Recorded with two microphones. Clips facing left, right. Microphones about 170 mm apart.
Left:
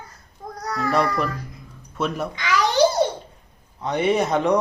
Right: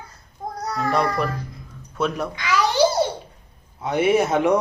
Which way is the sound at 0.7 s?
Centre (ahead or behind).